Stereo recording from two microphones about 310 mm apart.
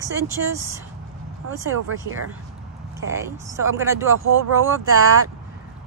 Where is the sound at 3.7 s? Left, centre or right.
Centre.